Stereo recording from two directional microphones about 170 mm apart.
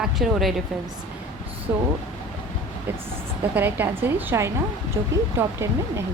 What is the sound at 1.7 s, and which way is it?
Speech, 15° right (ahead or behind).